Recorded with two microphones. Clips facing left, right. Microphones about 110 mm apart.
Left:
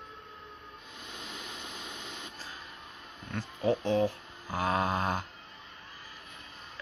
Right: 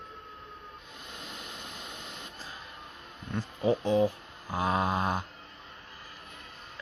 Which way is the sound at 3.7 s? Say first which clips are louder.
Right 2 dB; 10° right (ahead or behind).